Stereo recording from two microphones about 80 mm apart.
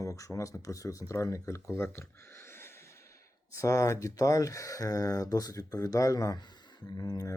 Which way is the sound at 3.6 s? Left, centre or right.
Left.